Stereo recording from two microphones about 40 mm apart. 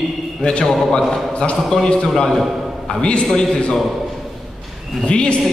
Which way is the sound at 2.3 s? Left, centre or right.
Centre.